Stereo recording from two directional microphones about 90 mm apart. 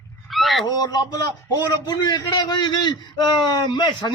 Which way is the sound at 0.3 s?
Centre (ahead or behind).